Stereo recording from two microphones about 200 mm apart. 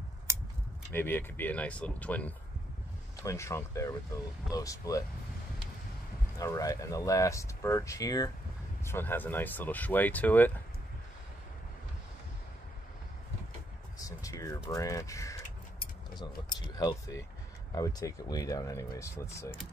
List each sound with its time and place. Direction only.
0.9 s speech: 10° left (ahead or behind)
6.3 s speech: 15° left (ahead or behind)
13.9 s a sound: 15° left (ahead or behind)
14.7 s keys jangling: 15° left (ahead or behind)
16.7 s speech: 20° left (ahead or behind)